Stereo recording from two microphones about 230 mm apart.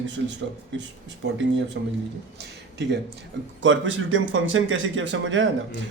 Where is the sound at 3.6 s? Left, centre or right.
Right.